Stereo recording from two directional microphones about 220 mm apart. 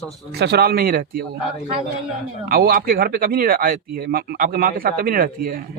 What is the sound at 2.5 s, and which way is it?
Speech, 40° right (ahead or behind).